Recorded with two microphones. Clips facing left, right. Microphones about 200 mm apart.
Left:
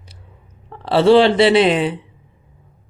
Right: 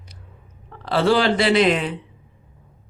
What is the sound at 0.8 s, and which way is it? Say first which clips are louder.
A man's voice: left 7 dB; 30° left (ahead or behind).